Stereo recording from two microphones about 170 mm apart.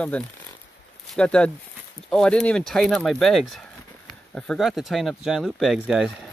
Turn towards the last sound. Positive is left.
turn(degrees=-5)  # may be behind; listen again after turning